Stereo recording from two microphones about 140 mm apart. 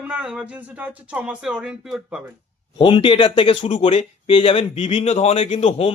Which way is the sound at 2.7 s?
40° left (ahead or behind).